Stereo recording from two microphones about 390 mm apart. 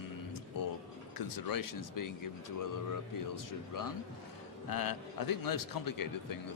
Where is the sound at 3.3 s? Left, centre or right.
Left.